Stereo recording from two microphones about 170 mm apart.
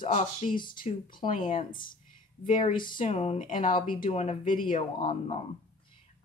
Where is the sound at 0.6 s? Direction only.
55° left (ahead or behind).